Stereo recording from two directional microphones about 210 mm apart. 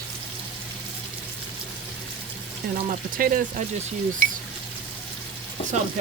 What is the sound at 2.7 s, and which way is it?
Speech, 40° right (ahead or behind).